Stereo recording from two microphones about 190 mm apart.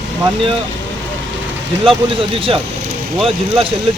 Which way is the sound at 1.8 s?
30° right (ahead or behind).